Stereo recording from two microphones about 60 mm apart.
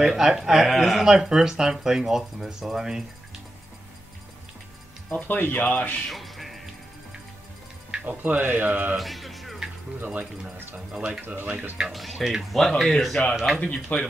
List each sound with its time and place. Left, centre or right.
0.0 s speech: centre
5.1 s speech: left
6.0 s music: centre
8.0 s speech: right
8.9 s speech: centre
9.9 s speech: right
10.9 s speech: centre
11.1 s speech: right
11.9 s speech: centre
13.6 s speech: left